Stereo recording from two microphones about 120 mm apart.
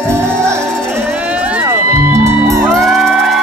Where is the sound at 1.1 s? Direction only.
10° right (ahead or behind).